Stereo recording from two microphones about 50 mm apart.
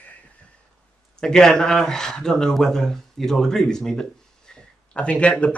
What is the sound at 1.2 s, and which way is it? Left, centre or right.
Speech, centre.